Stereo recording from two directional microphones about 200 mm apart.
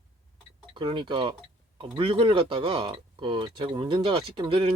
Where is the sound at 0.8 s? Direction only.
25° right (ahead or behind).